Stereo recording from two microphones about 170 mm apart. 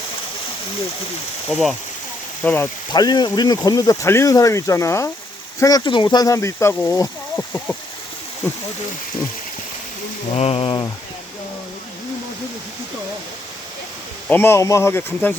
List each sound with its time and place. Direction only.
1.5 s speech: centre (ahead or behind)
2.9 s speech: 25° left (ahead or behind); by 7.8 s 10° left (ahead or behind)
10.3 s speech: 35° left (ahead or behind)
14.3 s speech: 15° left (ahead or behind)